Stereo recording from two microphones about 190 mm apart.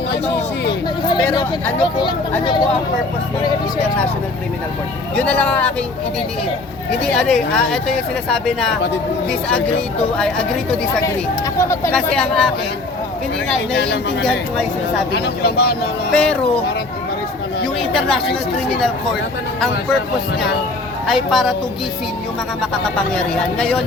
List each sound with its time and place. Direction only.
0.7 s speech: 25° left (ahead or behind)
5.1 s speech: 5° left (ahead or behind)
7.0 s speech: 5° left (ahead or behind)
11.6 s speech: 15° left (ahead or behind)
12.1 s speech: 5° left (ahead or behind)
15.1 s speech: 60° left (ahead or behind)
16.1 s speech: 5° left (ahead or behind)
17.7 s speech: 5° left (ahead or behind)
19.5 s speech: centre (ahead or behind)
21.1 s speech: centre (ahead or behind)
22.6 s speech: 5° left (ahead or behind)